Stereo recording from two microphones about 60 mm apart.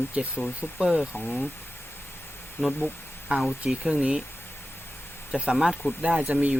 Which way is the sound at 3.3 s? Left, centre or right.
Centre.